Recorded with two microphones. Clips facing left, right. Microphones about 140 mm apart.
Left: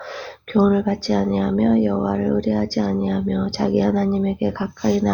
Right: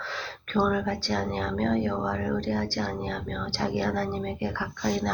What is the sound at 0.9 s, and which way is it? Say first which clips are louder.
Speech: left 9 dB; 45° left (ahead or behind).